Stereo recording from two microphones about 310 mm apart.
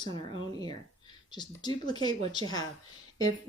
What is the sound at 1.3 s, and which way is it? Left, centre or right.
Speech, centre.